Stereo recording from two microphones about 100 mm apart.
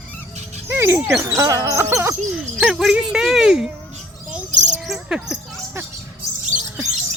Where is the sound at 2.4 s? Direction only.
10° right (ahead or behind).